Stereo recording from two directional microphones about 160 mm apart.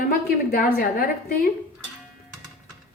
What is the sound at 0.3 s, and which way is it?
A woman's voice, 70° left (ahead or behind).